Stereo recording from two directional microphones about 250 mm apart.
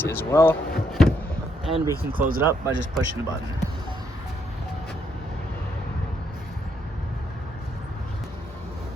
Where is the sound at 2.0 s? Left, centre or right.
Right.